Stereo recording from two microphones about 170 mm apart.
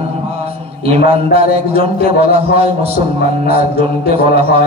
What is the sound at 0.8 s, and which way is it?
A man's voice, 35° right (ahead or behind).